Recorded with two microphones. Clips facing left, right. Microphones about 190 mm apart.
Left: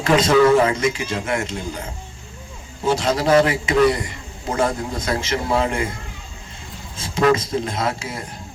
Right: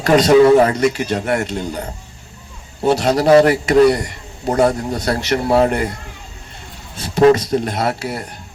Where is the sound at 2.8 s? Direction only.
65° right (ahead or behind).